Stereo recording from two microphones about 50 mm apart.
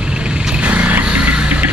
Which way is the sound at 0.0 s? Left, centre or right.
Right.